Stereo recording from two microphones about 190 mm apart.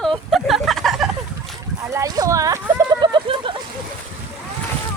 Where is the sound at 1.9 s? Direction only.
15° right (ahead or behind).